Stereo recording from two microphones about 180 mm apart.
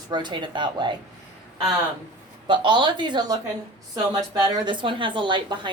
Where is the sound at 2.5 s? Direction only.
25° right (ahead or behind).